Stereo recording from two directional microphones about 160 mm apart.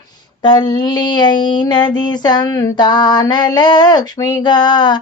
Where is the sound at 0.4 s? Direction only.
30° left (ahead or behind).